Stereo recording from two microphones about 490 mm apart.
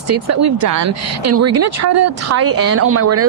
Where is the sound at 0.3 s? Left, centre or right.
Right.